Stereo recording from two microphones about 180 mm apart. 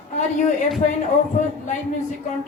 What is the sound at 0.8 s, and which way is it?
Speech, 40° left (ahead or behind).